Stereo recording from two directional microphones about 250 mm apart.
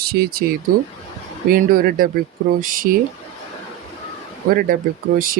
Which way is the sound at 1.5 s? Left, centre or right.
Right.